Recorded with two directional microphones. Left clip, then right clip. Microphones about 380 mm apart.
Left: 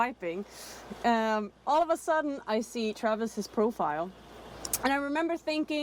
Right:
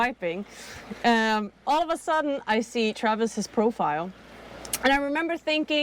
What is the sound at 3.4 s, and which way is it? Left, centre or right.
Speech, centre.